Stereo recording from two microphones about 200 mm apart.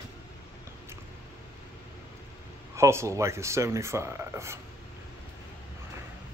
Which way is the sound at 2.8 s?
15° right (ahead or behind).